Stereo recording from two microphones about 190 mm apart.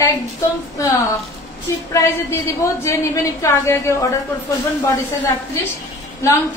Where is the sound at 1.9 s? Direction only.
15° left (ahead or behind).